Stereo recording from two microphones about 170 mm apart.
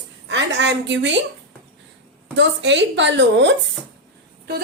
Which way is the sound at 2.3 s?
90° right.